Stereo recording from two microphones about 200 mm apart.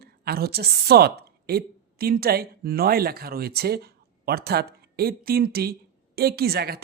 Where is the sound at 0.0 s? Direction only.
50° right (ahead or behind).